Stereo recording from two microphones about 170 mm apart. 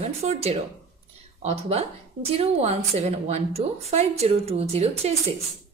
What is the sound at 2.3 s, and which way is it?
A woman's voice, 35° right (ahead or behind).